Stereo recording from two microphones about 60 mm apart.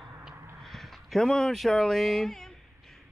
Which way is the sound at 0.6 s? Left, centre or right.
Centre.